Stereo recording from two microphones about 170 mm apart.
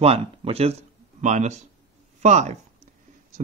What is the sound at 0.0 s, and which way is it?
Speech, 35° right (ahead or behind).